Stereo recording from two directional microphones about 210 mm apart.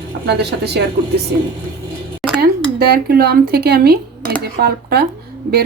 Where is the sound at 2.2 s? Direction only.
5° right (ahead or behind).